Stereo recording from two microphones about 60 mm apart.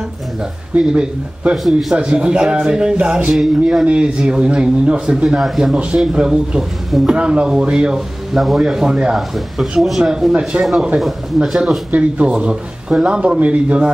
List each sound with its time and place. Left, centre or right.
0.7 s speech: centre
8.3 s speech: centre
9.6 s speech: centre
11.9 s speech: centre